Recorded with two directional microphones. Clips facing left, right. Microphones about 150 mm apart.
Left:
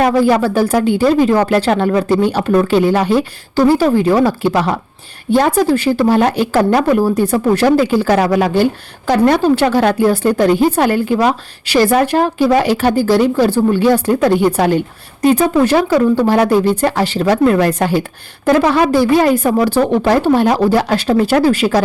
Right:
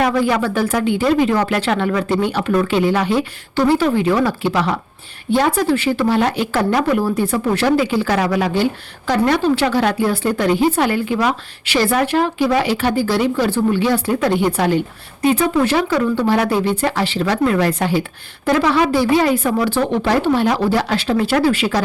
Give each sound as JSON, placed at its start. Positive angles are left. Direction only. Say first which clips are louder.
{"t": 0.0, "sound": "speech", "louder": "left 5 dB", "side_deg": 35}